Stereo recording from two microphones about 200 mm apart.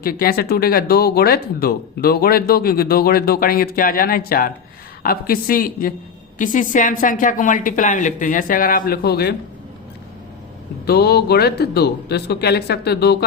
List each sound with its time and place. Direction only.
0.0 s a woman's voice: 50° left (ahead or behind)
10.8 s speech: 55° left (ahead or behind)